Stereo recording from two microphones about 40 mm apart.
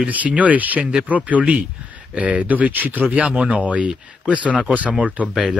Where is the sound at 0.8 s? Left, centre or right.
Right.